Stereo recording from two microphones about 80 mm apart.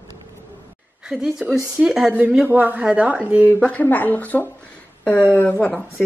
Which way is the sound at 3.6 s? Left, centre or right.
Centre.